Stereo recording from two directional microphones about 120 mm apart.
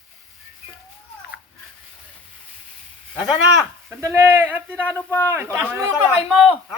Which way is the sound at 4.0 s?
20° right (ahead or behind).